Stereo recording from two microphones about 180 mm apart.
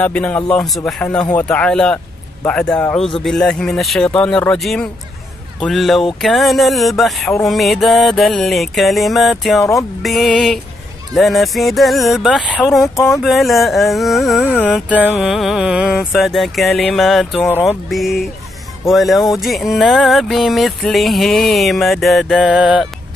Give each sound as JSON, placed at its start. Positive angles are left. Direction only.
{"t": 0.0, "sound": "music", "side_deg": 10}
{"t": 2.4, "sound": "speech", "side_deg": 5}
{"t": 3.2, "sound": "music", "side_deg": 0}
{"t": 14.4, "sound": "speech", "side_deg": 10}
{"t": 15.0, "sound": "music", "side_deg": 0}